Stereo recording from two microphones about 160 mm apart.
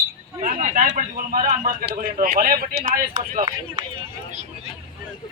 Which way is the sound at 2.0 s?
55° right (ahead or behind).